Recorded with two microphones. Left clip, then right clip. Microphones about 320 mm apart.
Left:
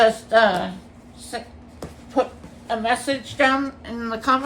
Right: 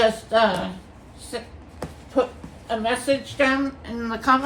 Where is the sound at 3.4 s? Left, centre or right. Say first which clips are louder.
Left 4 dB; centre.